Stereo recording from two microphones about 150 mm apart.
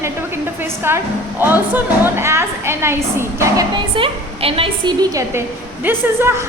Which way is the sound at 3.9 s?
35° right (ahead or behind).